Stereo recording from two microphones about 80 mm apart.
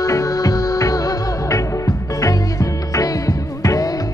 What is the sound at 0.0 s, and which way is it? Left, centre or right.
Music, left.